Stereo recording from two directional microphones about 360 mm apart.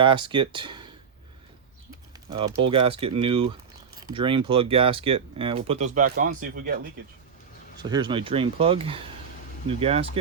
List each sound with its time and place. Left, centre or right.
0.0 s speech: centre
2.1 s speech: centre
7.8 s speech: centre